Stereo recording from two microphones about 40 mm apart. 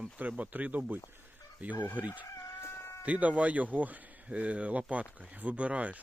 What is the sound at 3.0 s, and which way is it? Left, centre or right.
Speech, right.